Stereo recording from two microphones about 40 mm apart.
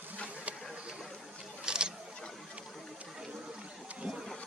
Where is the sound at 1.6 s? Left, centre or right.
Right.